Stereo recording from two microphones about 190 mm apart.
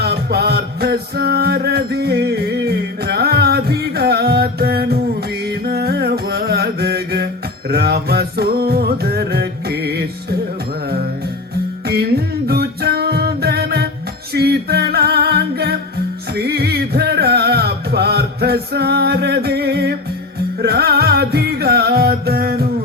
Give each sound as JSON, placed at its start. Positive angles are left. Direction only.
{"t": 0.0, "sound": "music", "side_deg": -55}
{"t": 14.3, "sound": "singing", "side_deg": -55}
{"t": 16.3, "sound": "music", "side_deg": -55}